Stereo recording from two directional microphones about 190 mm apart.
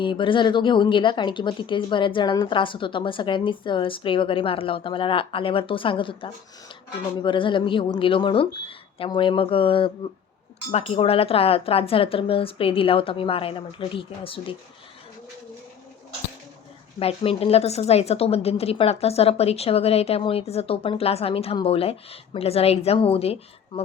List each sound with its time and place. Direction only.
0.0 s speech: 25° left (ahead or behind)
17.0 s a woman's voice: 30° left (ahead or behind)